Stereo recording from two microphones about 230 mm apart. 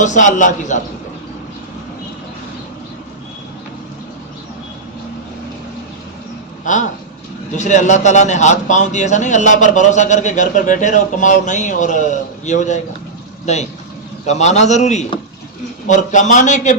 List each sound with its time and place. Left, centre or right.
0.0 s a man's voice: left
6.7 s a man's voice: left